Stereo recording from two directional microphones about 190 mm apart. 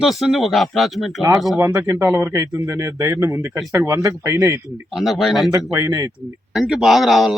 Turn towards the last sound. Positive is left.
turn(degrees=0)  # may be behind; listen again after turning